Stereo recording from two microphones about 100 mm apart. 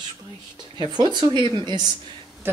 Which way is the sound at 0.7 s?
50° right (ahead or behind).